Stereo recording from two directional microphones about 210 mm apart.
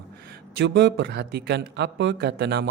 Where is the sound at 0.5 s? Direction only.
55° right (ahead or behind).